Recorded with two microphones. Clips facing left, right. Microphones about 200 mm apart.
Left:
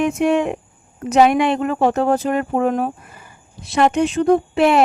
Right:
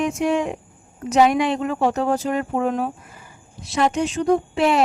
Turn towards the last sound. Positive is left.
turn(degrees=60)  # may be behind; listen again after turning